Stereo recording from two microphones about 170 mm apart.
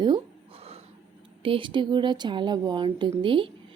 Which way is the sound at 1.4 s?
30° right (ahead or behind).